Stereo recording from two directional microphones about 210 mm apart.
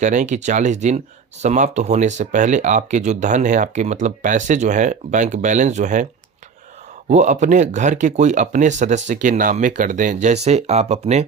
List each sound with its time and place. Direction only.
0.0 s speech: 35° right (ahead or behind)
7.1 s speech: 35° right (ahead or behind)